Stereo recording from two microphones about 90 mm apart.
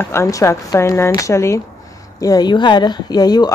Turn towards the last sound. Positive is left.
turn(degrees=45)  # may be behind; listen again after turning